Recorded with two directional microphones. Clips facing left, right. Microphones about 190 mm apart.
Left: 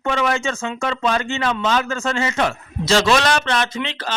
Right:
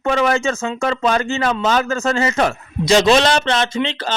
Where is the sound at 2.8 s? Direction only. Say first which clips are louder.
Right 4 dB; 20° right (ahead or behind).